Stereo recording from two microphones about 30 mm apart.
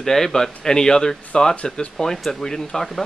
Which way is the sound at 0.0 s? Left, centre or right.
Centre.